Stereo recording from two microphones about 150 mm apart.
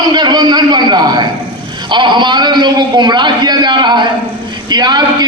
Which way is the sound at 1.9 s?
30° right (ahead or behind).